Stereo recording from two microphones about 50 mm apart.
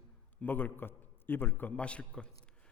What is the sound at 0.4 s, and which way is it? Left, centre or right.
A man's voice, left.